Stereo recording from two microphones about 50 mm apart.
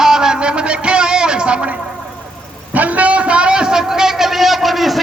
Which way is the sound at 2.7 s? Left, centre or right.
Right.